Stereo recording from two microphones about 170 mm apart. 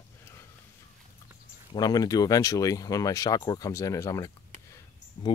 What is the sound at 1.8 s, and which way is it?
Speech, 20° left (ahead or behind).